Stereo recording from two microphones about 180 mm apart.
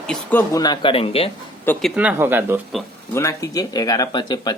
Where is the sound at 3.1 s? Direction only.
15° left (ahead or behind).